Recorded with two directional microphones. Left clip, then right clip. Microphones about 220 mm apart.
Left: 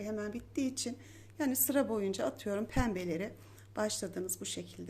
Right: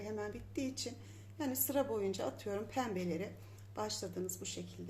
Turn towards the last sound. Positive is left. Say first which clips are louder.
# left 3 dB
turn(degrees=35)  # may be behind; listen again after turning